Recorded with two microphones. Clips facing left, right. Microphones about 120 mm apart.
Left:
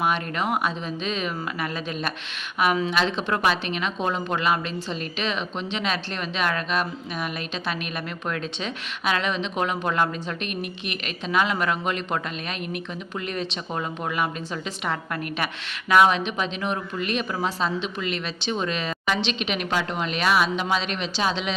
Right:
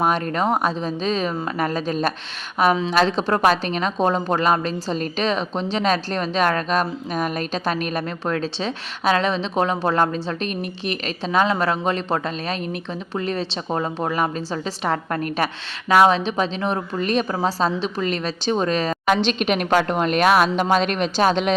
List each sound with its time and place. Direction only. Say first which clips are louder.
0.0 s a woman's voice: right 5 dB; 35° right (ahead or behind)